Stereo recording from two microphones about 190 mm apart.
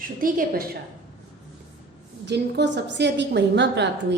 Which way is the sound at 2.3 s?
65° right (ahead or behind).